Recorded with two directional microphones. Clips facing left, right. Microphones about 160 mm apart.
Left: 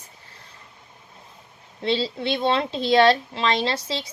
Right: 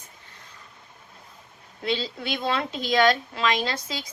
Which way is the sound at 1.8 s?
30° left (ahead or behind).